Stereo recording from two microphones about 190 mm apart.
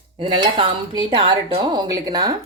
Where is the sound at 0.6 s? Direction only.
25° right (ahead or behind).